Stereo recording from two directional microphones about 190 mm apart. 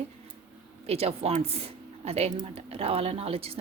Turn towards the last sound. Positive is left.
turn(degrees=-30)  # may be behind; listen again after turning